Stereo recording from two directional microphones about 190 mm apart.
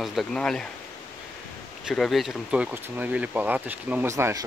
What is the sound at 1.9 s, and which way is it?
Speech, centre (ahead or behind).